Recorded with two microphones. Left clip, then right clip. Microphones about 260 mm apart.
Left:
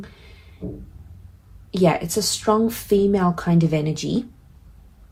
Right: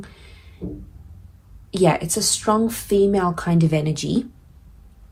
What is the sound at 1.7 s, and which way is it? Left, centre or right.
Speech, right.